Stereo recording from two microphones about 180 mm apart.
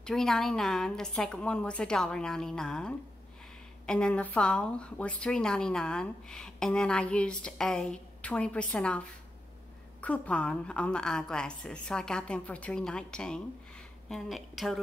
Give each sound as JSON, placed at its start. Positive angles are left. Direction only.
{"t": 0.0, "sound": "a woman's voice", "side_deg": 0}